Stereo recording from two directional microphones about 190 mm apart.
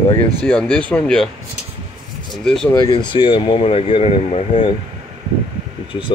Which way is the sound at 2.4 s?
5° left (ahead or behind).